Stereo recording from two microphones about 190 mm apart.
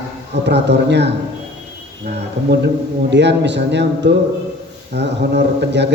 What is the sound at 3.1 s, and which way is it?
A man's voice, 65° right (ahead or behind).